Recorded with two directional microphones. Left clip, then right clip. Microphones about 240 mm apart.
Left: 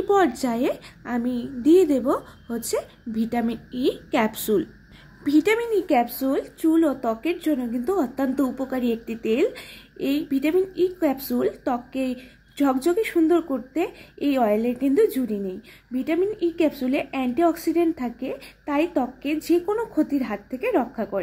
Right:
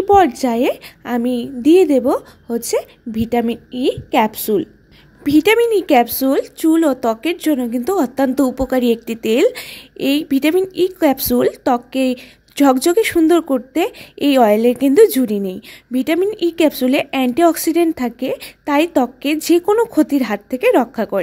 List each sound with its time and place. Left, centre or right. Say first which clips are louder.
0.0 s a woman's voice: right 8 dB; right
5.2 s speech: right 8 dB; right